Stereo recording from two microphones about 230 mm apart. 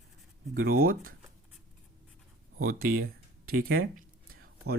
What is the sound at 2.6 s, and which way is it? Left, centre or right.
Speech, right.